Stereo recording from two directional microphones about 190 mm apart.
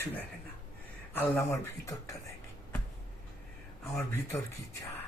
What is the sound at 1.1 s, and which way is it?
Speech, 15° left (ahead or behind).